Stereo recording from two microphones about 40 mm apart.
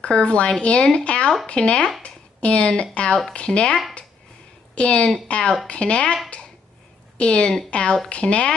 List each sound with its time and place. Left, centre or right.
0.0 s a woman's voice: left
2.0 s a sound: left
2.7 s speech: left
7.2 s speech: left